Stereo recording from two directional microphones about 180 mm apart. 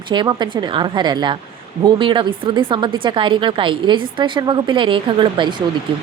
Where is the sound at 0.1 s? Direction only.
25° right (ahead or behind).